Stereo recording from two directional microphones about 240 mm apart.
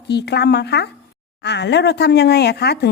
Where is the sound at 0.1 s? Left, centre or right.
Left.